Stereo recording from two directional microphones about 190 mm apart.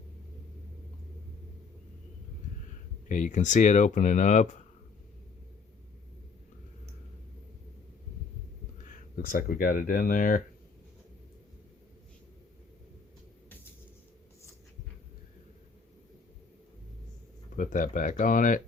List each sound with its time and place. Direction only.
3.1 s speech: 40° left (ahead or behind)
8.9 s speech: 50° left (ahead or behind)
17.6 s speech: 45° left (ahead or behind)